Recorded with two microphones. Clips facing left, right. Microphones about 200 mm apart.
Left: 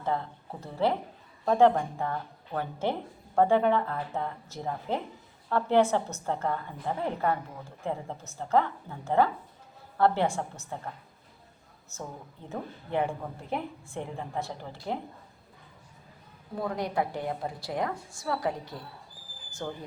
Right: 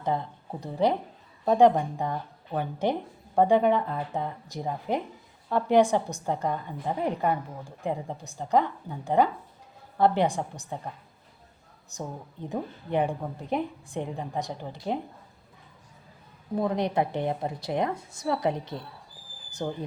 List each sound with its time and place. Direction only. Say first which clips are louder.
0.6 s a woman's voice: right 3 dB; 15° right (ahead or behind)
16.6 s a woman's voice: right 4 dB; 20° right (ahead or behind)